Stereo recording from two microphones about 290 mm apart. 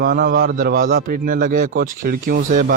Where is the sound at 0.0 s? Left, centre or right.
Right.